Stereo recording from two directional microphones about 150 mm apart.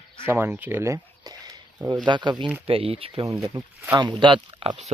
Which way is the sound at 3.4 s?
20° right (ahead or behind).